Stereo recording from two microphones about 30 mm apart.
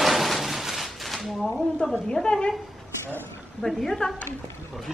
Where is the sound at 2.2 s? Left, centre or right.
Left.